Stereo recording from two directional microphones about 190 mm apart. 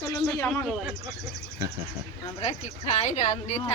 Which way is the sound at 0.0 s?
20° left (ahead or behind).